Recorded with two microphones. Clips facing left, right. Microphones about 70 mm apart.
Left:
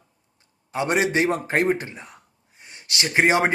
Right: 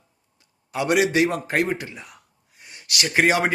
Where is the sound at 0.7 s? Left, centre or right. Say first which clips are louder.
Right 2 dB; left.